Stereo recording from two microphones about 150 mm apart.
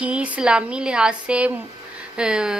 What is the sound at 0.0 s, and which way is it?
A woman's voice, 10° right (ahead or behind).